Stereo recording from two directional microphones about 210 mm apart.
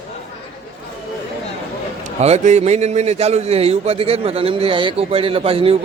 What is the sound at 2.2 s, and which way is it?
A man's voice, 30° right (ahead or behind).